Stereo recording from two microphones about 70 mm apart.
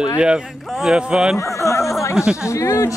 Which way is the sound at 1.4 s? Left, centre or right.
Left.